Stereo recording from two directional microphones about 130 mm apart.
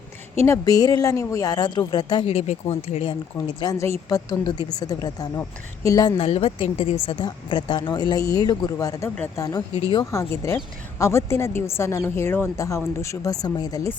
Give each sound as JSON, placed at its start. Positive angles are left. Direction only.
{"t": 0.4, "sound": "speech", "side_deg": 25}
{"t": 2.2, "sound": "speech", "side_deg": 50}
{"t": 3.1, "sound": "speech", "side_deg": 30}
{"t": 6.1, "sound": "speech", "side_deg": 50}